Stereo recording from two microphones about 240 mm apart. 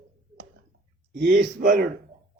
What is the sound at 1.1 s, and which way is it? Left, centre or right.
Speech, right.